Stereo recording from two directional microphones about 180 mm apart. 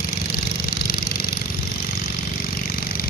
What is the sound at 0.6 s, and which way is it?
Engine, 55° left (ahead or behind).